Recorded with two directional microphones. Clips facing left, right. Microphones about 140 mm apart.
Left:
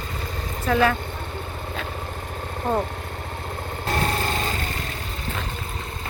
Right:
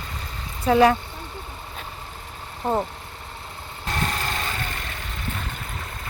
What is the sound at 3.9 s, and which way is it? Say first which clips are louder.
Lawn mower: left 3 dB; 40° left (ahead or behind).